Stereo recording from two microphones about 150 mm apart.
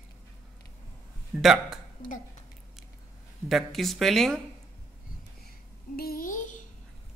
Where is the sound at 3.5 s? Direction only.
Centre (ahead or behind).